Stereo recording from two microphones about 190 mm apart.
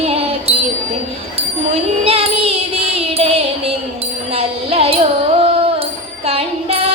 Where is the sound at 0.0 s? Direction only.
30° right (ahead or behind).